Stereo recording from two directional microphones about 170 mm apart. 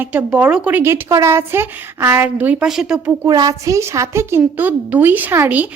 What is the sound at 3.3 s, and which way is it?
A woman's voice, 20° right (ahead or behind).